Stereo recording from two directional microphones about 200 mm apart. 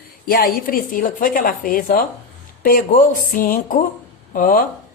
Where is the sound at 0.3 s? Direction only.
45° left (ahead or behind).